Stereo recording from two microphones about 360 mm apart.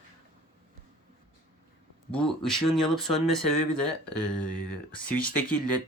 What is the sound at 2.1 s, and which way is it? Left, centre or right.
Speech, centre.